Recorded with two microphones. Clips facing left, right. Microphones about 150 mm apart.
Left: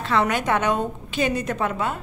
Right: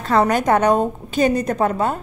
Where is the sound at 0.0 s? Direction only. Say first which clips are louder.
Right 5 dB; 40° right (ahead or behind).